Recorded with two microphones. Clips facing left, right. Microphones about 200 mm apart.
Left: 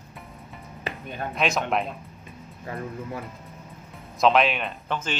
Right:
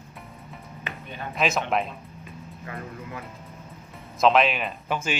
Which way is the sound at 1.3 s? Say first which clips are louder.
Right 1 dB; centre (ahead or behind).